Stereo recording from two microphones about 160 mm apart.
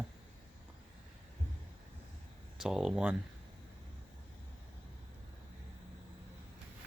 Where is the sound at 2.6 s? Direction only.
Centre (ahead or behind).